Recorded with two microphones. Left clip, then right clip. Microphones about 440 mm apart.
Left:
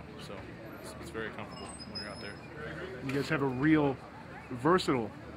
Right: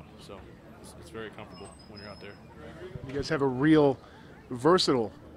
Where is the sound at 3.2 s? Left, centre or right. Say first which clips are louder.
Right 5 dB; right.